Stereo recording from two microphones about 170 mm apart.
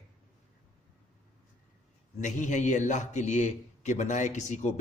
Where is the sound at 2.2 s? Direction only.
45° left (ahead or behind).